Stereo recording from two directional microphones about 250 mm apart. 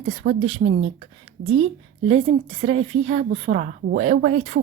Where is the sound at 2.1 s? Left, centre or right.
Right.